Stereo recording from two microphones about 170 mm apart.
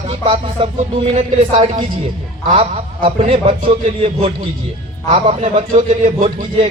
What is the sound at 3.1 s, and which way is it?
Speech, 40° right (ahead or behind).